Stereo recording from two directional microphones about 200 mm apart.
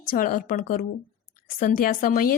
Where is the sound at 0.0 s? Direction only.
45° left (ahead or behind).